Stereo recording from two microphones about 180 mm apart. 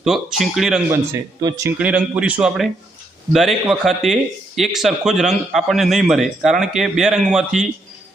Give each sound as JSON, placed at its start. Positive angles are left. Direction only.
{"t": 0.0, "sound": "speech", "side_deg": 0}
{"t": 1.4, "sound": "speech", "side_deg": -20}
{"t": 1.8, "sound": "a man's voice", "side_deg": -5}